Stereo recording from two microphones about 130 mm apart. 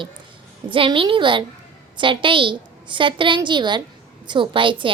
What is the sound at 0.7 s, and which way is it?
A woman's voice, 40° right (ahead or behind).